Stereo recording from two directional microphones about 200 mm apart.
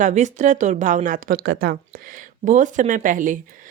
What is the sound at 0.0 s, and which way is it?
Speech, 35° right (ahead or behind).